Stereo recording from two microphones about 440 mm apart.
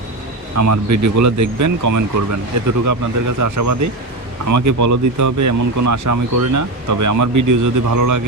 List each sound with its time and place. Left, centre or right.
0.5 s speech: right